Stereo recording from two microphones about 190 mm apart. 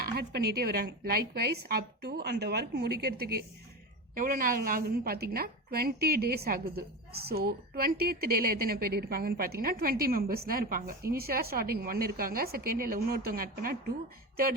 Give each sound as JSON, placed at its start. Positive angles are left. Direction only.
{"t": 0.0, "sound": "a woman's voice", "side_deg": -55}